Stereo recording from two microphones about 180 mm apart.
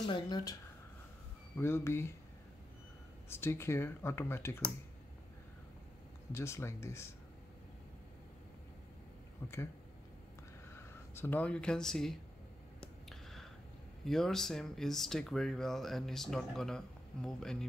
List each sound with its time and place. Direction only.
0.0 s speech: 25° left (ahead or behind)
1.6 s speech: 15° left (ahead or behind)
3.3 s speech: 15° left (ahead or behind)
6.3 s speech: 15° left (ahead or behind)
9.4 s speech: 10° left (ahead or behind)
10.7 s speech: 15° left (ahead or behind)
12.8 s a sound: centre (ahead or behind)
14.0 s speech: centre (ahead or behind)